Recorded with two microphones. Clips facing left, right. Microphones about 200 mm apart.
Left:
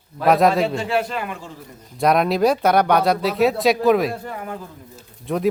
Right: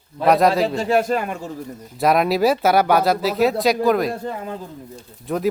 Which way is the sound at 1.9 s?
Centre (ahead or behind).